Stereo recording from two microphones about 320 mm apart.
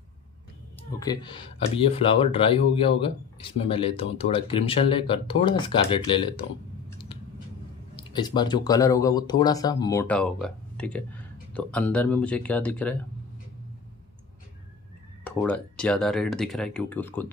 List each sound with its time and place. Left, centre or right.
0.9 s speech: centre
7.9 s speech: centre
15.2 s speech: centre